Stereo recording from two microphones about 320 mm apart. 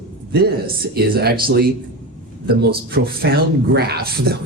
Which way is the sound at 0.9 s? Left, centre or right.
Right.